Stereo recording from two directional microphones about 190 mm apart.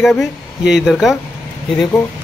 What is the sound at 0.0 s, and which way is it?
Speech, centre (ahead or behind).